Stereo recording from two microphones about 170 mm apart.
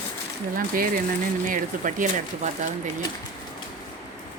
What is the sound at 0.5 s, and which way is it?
Speech, 55° right (ahead or behind).